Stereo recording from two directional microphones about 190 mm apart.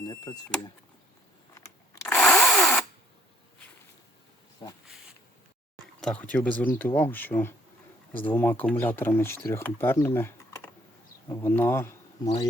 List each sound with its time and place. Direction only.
0.0 s speech: 15° left (ahead or behind)
2.0 s drill: 5° left (ahead or behind)
6.0 s speech: 5° left (ahead or behind)